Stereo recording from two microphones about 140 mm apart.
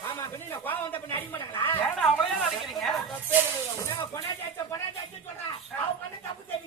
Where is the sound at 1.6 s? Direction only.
15° left (ahead or behind).